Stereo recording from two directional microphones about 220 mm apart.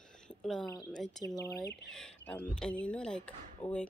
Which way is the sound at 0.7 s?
20° left (ahead or behind).